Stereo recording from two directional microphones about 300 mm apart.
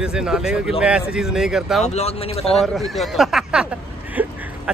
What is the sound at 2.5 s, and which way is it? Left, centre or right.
Speech, centre.